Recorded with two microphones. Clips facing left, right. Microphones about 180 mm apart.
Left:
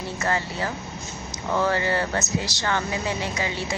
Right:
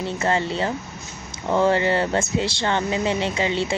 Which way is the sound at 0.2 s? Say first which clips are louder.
Right 4 dB; 25° right (ahead or behind).